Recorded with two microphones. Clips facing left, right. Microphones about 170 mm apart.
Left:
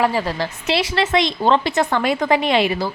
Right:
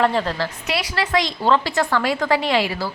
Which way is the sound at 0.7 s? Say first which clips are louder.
Left 4 dB; 25° left (ahead or behind).